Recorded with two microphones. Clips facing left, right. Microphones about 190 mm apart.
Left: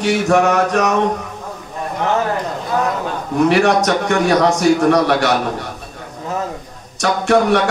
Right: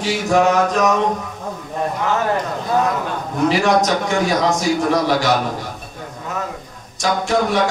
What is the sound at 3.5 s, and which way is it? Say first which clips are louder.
A man's voice: left 1 dB; 65° left (ahead or behind).